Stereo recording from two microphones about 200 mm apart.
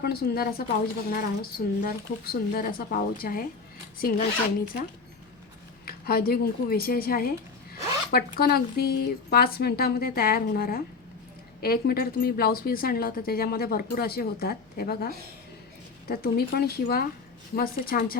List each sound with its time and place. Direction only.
0.0 s a woman's voice: 50° left (ahead or behind)